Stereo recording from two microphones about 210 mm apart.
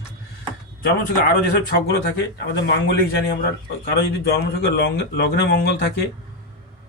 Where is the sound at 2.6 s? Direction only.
50° left (ahead or behind).